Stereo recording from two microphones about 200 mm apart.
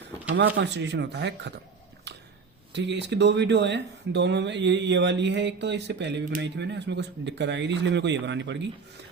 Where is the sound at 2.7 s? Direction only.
60° right (ahead or behind).